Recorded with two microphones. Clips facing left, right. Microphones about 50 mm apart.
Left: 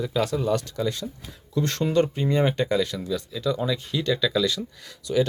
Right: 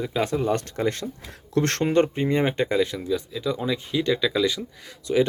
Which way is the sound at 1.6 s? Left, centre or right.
Right.